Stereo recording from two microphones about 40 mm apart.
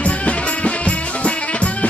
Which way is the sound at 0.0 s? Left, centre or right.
Left.